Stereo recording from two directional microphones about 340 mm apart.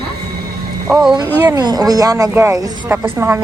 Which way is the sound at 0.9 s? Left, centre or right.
Centre.